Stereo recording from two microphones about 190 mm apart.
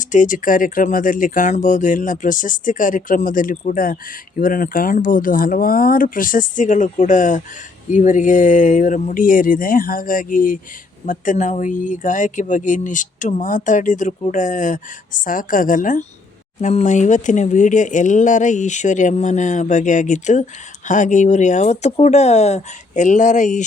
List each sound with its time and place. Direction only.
0.0 s speech: 40° left (ahead or behind)